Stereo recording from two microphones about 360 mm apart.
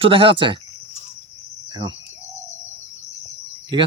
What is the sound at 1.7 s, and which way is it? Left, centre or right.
Speech, centre.